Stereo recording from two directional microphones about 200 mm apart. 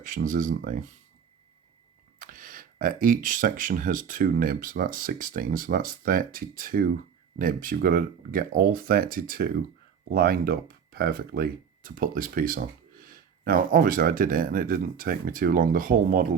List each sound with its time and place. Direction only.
0.0 s speech: 40° right (ahead or behind)
2.1 s speech: 45° right (ahead or behind)